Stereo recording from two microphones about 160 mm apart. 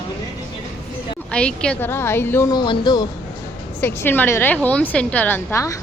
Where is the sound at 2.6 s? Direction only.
25° left (ahead or behind).